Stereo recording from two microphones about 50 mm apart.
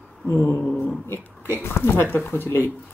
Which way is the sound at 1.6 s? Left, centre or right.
Left.